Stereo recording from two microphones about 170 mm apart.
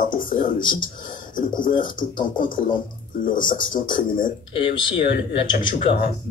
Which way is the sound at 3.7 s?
30° left (ahead or behind).